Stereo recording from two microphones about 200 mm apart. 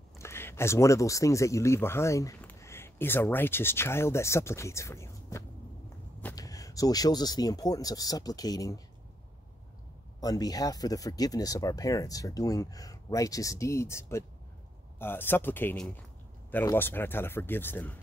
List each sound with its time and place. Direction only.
0.2 s speech: 10° left (ahead or behind)
10.2 s speech: 20° left (ahead or behind)